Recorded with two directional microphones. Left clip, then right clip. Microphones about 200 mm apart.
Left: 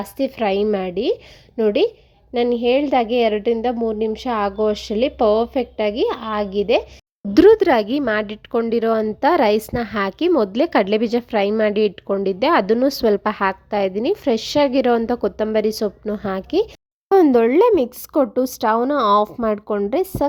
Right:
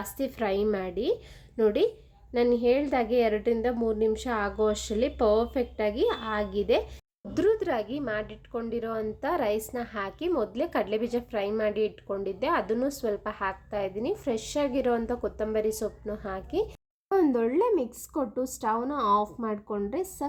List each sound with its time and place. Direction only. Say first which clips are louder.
0.0 s a woman's voice: left 10 dB; 35° left (ahead or behind)
7.3 s a woman's voice: left 14 dB; 45° left (ahead or behind)